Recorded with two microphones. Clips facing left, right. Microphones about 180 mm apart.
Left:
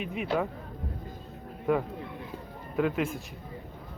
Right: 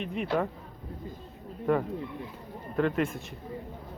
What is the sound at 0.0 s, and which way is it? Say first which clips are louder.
Speech: even; 5° left (ahead or behind).